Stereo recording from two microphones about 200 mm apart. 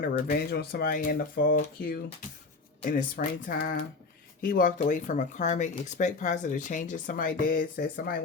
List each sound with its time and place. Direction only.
0.0 s speech: 45° left (ahead or behind)